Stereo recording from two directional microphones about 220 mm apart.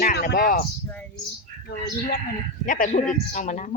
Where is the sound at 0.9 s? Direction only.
5° left (ahead or behind).